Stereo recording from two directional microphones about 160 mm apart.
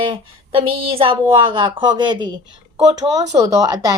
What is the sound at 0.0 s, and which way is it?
Speech, 35° right (ahead or behind).